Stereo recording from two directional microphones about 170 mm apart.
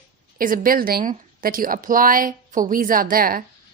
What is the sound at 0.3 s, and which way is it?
Speech, 55° right (ahead or behind).